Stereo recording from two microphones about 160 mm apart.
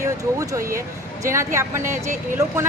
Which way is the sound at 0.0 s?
20° right (ahead or behind).